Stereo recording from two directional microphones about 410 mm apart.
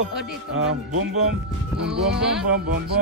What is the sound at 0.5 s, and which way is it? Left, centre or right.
Speech, right.